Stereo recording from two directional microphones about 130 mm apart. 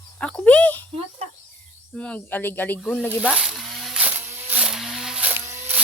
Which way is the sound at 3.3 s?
5° right (ahead or behind).